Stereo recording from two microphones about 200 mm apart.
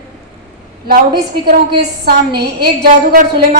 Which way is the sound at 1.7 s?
55° right (ahead or behind).